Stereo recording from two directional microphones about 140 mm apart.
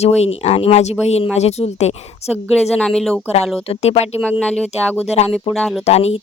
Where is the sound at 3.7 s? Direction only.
50° left (ahead or behind).